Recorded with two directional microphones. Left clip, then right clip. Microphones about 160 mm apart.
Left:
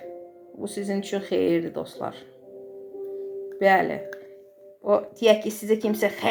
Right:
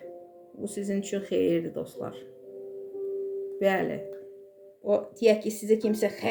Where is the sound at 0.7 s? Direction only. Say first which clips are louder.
Left 3 dB; 25° right (ahead or behind).